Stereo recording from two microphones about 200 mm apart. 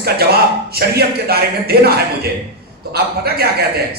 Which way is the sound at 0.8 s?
50° right (ahead or behind).